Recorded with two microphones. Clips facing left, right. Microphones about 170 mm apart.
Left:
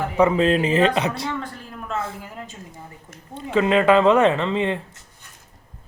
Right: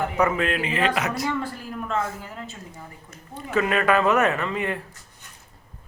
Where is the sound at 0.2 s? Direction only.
30° left (ahead or behind).